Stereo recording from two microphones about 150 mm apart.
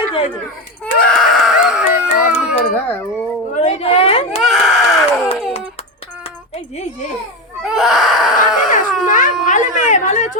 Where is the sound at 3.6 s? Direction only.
45° left (ahead or behind).